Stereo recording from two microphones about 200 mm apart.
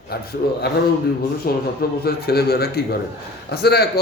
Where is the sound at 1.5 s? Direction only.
50° left (ahead or behind).